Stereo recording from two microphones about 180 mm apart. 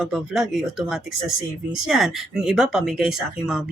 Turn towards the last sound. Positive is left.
turn(degrees=0)  # may be behind; listen again after turning